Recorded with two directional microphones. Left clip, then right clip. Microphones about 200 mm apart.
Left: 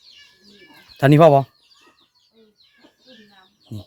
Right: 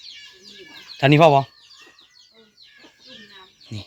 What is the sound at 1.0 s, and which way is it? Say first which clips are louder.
Speech: left 2 dB; 45° left (ahead or behind).